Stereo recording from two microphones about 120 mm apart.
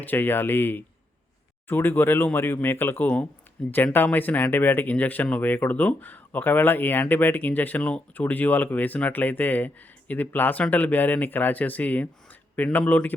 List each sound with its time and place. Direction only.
0.0 s speech: 15° left (ahead or behind)